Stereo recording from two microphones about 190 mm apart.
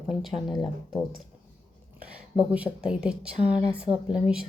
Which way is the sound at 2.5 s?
5° right (ahead or behind).